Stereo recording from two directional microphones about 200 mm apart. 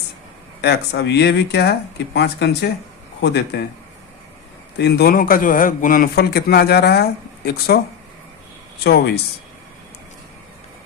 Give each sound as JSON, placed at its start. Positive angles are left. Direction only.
{"t": 0.6, "sound": "a man's voice", "side_deg": 60}
{"t": 4.8, "sound": "a man's voice", "side_deg": 50}
{"t": 8.8, "sound": "speech", "side_deg": 55}